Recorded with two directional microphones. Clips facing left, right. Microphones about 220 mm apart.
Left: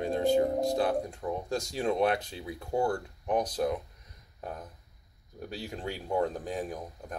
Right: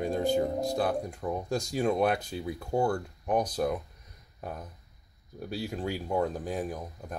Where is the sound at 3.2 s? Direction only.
10° right (ahead or behind).